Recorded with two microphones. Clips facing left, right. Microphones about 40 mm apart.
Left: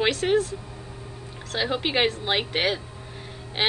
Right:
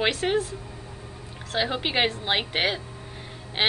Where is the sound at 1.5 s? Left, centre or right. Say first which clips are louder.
Left 1 dB; centre.